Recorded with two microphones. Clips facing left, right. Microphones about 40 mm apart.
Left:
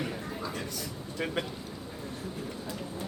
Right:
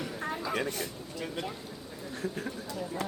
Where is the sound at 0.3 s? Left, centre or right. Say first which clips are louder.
Right 4 dB; right.